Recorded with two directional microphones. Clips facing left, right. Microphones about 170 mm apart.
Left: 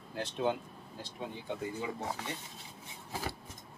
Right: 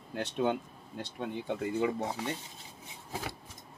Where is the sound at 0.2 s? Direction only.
60° right (ahead or behind).